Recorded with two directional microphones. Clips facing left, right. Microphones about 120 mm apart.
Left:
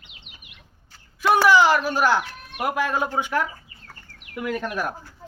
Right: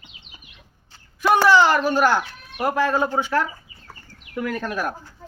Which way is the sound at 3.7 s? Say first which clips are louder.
Right 1 dB; 60° left (ahead or behind).